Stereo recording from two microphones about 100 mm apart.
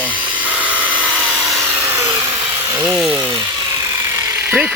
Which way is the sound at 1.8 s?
25° right (ahead or behind).